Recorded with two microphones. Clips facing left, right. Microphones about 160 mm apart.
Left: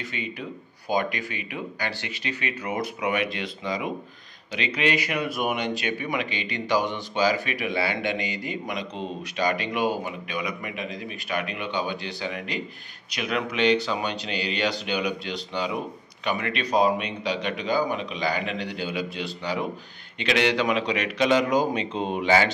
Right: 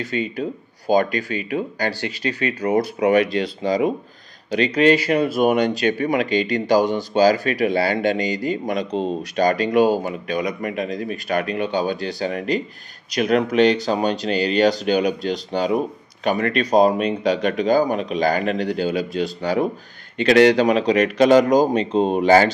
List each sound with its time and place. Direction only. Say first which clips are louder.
0.0 s speech: right 10 dB; 35° right (ahead or behind)